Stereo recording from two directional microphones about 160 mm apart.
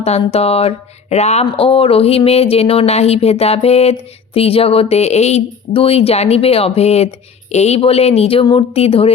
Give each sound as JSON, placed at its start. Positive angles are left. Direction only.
{"t": 0.0, "sound": "speech", "side_deg": 40}